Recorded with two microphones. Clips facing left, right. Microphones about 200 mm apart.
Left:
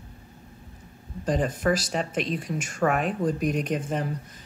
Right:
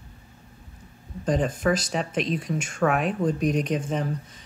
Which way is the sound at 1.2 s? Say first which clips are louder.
Right 1 dB; centre (ahead or behind).